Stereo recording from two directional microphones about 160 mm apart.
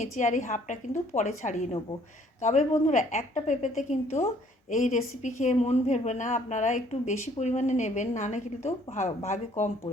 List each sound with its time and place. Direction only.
0.0 s a woman's voice: 50° left (ahead or behind)